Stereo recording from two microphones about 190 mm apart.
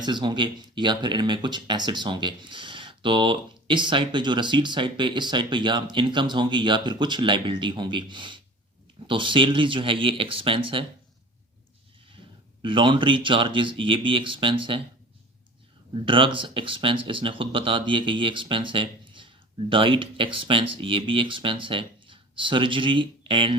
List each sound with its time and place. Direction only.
0.0 s speech: 25° right (ahead or behind)
12.6 s speech: 25° right (ahead or behind)
16.0 s speech: 25° right (ahead or behind)